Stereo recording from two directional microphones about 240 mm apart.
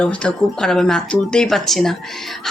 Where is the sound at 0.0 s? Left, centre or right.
Centre.